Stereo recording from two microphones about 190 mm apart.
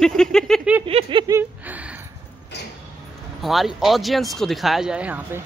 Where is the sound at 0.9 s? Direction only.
30° right (ahead or behind).